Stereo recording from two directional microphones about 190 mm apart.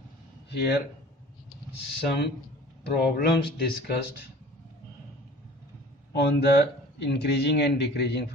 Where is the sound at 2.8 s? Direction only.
60° left (ahead or behind).